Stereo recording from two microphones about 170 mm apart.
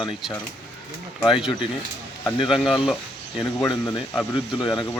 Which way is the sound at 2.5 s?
Centre (ahead or behind).